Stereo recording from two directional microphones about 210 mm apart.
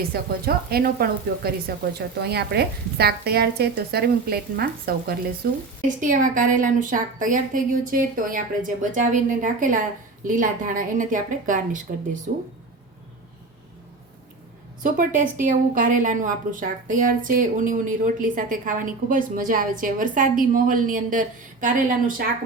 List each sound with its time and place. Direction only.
0.1 s a woman's voice: 45° right (ahead or behind)
14.8 s a woman's voice: 40° right (ahead or behind)